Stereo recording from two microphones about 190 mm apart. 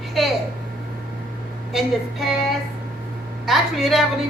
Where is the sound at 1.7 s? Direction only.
Centre (ahead or behind).